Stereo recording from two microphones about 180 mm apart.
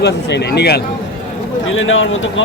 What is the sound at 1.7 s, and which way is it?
Speech, 90° left.